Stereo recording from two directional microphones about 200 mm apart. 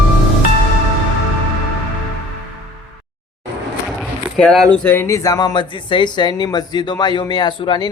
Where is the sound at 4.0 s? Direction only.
Centre (ahead or behind).